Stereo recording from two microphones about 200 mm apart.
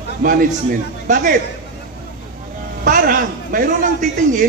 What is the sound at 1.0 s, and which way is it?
Speech, 40° right (ahead or behind).